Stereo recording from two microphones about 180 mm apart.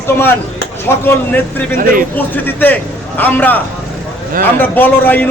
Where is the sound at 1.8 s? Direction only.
50° right (ahead or behind).